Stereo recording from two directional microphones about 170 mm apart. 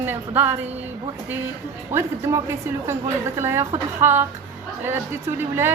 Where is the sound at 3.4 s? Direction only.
15° right (ahead or behind).